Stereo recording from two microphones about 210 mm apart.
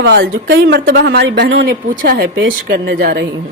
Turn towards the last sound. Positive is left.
turn(degrees=-50)  # may be behind; listen again after turning